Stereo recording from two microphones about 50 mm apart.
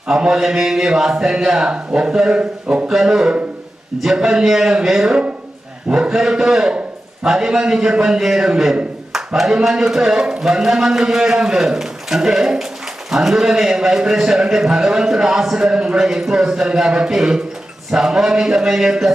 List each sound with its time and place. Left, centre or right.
0.1 s a man's voice: centre
2.9 s a man's voice: centre